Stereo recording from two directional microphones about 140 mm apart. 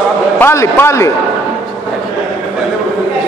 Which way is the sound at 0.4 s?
15° left (ahead or behind).